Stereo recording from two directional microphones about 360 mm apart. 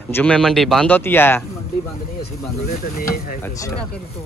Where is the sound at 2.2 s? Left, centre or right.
Left.